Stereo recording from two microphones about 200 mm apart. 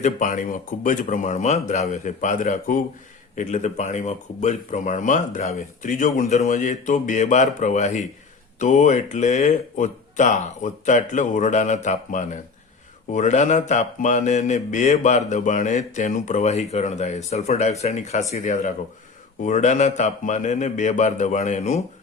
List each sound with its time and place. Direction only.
0.0 s speech: 40° left (ahead or behind)